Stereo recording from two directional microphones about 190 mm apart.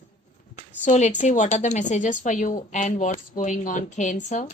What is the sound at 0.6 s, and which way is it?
A woman's voice, 40° left (ahead or behind).